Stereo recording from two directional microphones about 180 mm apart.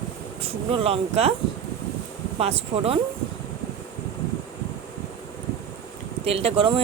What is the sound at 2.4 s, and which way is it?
Speech, 35° right (ahead or behind).